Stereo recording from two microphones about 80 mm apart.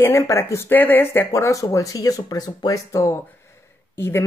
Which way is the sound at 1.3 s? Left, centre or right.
Left.